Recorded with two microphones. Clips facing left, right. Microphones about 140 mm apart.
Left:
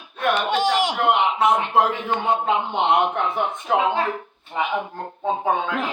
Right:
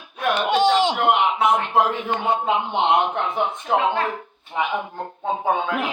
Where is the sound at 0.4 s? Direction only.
20° right (ahead or behind).